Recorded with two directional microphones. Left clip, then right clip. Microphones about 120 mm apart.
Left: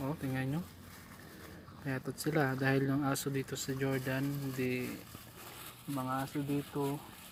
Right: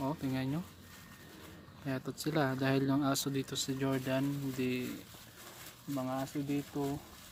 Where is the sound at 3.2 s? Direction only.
30° right (ahead or behind).